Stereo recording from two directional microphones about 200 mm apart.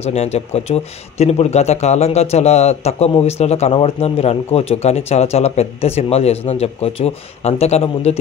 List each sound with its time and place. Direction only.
0.0 s speech: 30° left (ahead or behind)